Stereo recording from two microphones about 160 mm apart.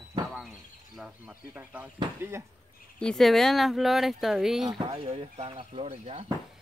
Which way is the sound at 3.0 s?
5° left (ahead or behind).